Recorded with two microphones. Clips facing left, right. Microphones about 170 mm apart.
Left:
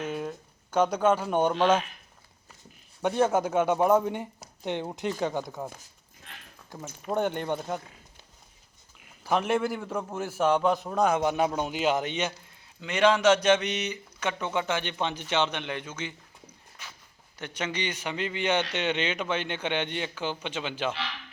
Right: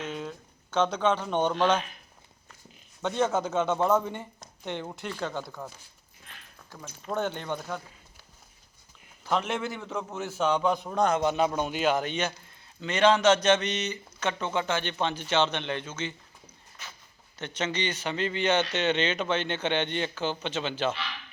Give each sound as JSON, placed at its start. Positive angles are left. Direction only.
{"t": 0.0, "sound": "speech", "side_deg": 10}
{"t": 3.0, "sound": "a man's voice", "side_deg": 10}
{"t": 9.2, "sound": "a man's voice", "side_deg": 10}
{"t": 16.8, "sound": "a sound", "side_deg": 10}
{"t": 17.3, "sound": "a man's voice", "side_deg": 10}